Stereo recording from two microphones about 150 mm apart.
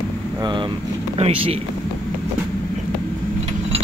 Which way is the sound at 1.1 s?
45° right (ahead or behind).